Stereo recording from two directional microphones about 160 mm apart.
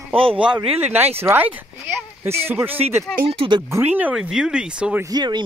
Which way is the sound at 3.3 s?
30° right (ahead or behind).